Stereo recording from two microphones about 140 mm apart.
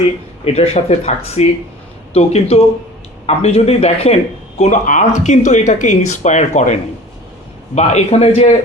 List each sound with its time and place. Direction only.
0.4 s speech: 50° left (ahead or behind)
7.8 s speech: 50° left (ahead or behind)